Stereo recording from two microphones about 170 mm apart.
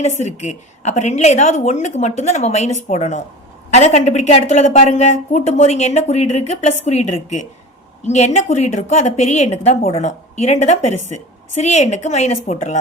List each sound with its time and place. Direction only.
0.0 s a woman's voice: 40° left (ahead or behind)